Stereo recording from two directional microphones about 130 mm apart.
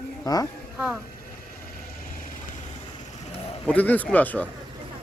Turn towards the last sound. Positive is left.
turn(degrees=10)  # may be behind; listen again after turning